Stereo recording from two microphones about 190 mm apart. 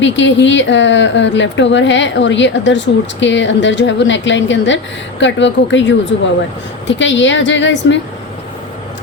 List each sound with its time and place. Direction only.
0.0 s speech: 75° left (ahead or behind)